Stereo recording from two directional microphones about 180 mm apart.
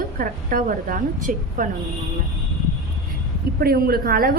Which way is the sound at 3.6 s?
55° right (ahead or behind).